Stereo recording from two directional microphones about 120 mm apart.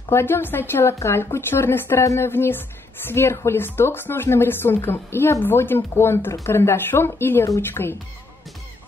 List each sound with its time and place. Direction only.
0.1 s a woman's voice: 20° left (ahead or behind)